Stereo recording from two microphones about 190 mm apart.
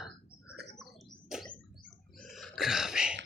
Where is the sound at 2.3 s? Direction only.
Centre (ahead or behind).